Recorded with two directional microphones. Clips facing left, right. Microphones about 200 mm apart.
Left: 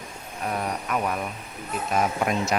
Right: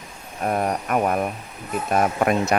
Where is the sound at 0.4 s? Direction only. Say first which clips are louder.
Right 6 dB; 45° right (ahead or behind).